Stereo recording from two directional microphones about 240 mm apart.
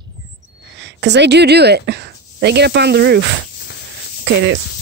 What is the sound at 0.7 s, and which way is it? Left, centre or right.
Speech, right.